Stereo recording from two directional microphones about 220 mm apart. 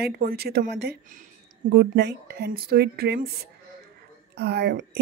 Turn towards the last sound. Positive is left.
turn(degrees=-50)  # may be behind; listen again after turning